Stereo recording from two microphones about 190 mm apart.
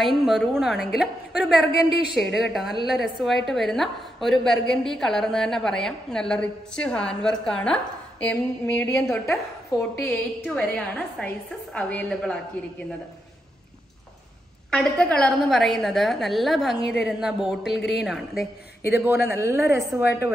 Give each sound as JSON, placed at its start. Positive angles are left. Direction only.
{"t": 0.0, "sound": "a woman's voice", "side_deg": 0}
{"t": 14.7, "sound": "a woman's voice", "side_deg": 5}
{"t": 17.6, "sound": "a man's voice", "side_deg": 60}
{"t": 17.9, "sound": "a woman's voice", "side_deg": 0}
{"t": 18.9, "sound": "a woman's voice", "side_deg": -10}